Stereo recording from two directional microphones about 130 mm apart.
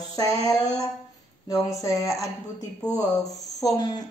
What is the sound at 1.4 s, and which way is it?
Mantra, 25° left (ahead or behind).